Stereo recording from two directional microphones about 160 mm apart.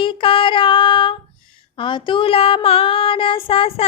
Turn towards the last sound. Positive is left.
turn(degrees=35)  # may be behind; listen again after turning